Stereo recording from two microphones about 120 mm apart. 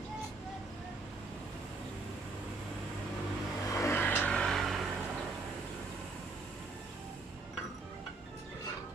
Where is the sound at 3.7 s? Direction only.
20° left (ahead or behind); by 4.8 s centre (ahead or behind).